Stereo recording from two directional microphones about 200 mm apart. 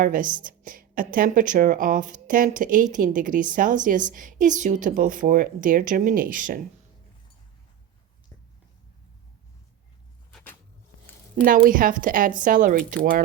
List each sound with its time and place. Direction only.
0.0 s speech: 40° right (ahead or behind)
10.3 s a sound: 10° left (ahead or behind)
11.4 s speech: 45° right (ahead or behind)